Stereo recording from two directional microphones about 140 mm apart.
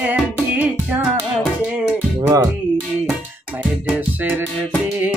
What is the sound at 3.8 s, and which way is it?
Music, 10° right (ahead or behind).